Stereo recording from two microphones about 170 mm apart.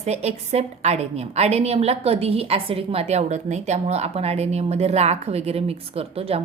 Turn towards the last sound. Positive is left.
turn(degrees=-35)  # may be behind; listen again after turning